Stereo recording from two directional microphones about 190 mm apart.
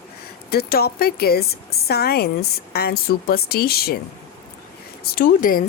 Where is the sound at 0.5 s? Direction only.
55° left (ahead or behind).